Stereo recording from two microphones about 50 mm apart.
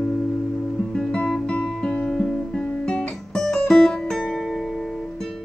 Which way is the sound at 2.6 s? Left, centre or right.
Centre.